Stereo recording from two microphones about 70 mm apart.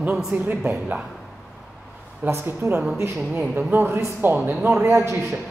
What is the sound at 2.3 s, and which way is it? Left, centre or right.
Speech, right.